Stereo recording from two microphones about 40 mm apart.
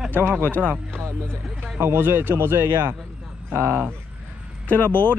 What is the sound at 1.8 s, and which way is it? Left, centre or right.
A man's voice, right.